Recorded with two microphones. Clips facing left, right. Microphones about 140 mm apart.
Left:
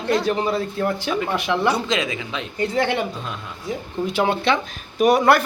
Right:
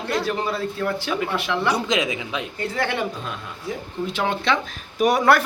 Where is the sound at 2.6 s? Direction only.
20° left (ahead or behind).